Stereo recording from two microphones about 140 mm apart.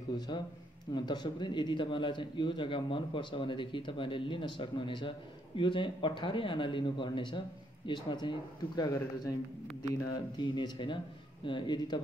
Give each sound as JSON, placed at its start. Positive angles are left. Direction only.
{"t": 0.9, "sound": "a man's voice", "side_deg": 30}